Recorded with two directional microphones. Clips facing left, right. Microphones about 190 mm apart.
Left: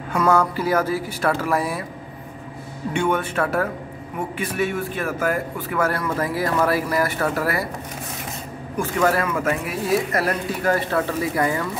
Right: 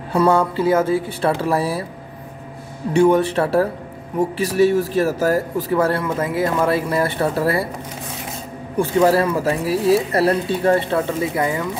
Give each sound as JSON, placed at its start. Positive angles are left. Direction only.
{"t": 0.1, "sound": "speech", "side_deg": -30}
{"t": 2.9, "sound": "speech", "side_deg": -35}
{"t": 8.7, "sound": "speech", "side_deg": -30}